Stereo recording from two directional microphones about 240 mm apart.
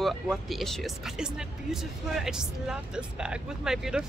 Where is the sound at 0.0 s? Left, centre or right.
Centre.